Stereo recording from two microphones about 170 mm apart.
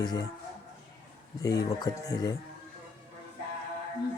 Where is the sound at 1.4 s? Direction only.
20° left (ahead or behind).